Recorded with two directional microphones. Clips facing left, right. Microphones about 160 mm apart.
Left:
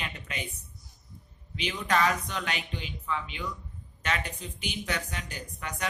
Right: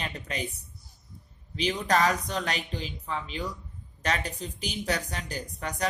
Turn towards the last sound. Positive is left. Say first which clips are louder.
# right 4 dB
turn(degrees=-35)  # may be behind; listen again after turning